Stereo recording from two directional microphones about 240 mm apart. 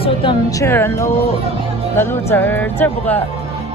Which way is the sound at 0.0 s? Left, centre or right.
Centre.